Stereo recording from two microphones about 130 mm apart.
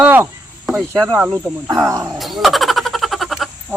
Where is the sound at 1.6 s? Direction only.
25° right (ahead or behind).